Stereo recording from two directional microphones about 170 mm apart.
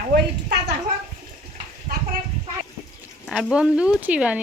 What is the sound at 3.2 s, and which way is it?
Speech, centre (ahead or behind).